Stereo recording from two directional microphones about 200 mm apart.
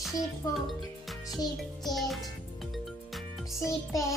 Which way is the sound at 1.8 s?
Centre (ahead or behind).